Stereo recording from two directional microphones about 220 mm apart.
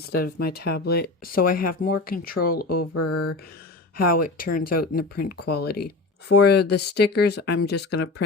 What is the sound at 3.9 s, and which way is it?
Speech, 40° left (ahead or behind).